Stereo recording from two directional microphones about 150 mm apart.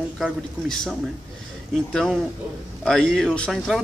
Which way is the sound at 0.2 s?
Centre (ahead or behind).